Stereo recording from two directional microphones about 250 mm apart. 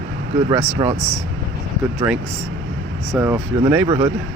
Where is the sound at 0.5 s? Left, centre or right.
Centre.